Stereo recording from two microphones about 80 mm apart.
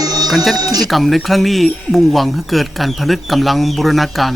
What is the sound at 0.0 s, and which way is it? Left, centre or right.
Music, right.